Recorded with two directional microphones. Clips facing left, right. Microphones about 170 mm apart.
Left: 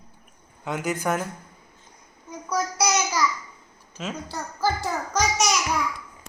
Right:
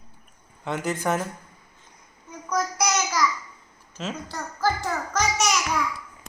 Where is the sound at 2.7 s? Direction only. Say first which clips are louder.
Left 1 dB; 30° left (ahead or behind).